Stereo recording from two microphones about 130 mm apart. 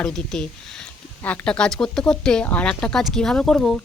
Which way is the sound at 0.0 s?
5° left (ahead or behind).